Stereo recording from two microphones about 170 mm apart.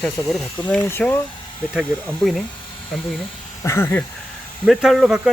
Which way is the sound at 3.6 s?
15° left (ahead or behind).